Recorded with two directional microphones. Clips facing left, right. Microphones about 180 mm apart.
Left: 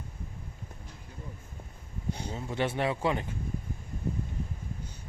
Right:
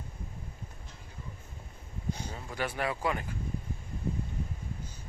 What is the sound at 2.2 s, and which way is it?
Speech, 25° left (ahead or behind).